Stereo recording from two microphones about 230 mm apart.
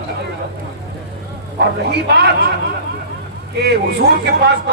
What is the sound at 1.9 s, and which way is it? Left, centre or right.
Speech, right.